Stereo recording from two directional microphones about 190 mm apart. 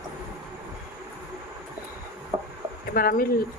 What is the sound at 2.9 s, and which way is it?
Speech, 50° left (ahead or behind).